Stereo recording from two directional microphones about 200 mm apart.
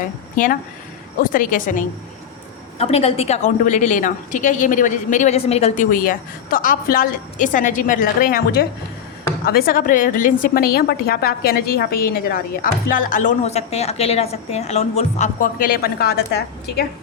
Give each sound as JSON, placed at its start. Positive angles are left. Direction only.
{"t": 1.2, "sound": "a woman's voice", "side_deg": 45}
{"t": 2.7, "sound": "a woman's voice", "side_deg": 30}